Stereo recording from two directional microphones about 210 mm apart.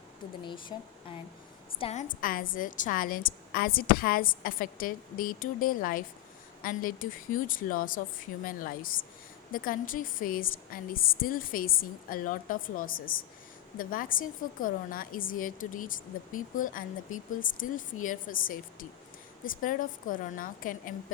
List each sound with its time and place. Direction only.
1.8 s a woman's voice: 35° left (ahead or behind)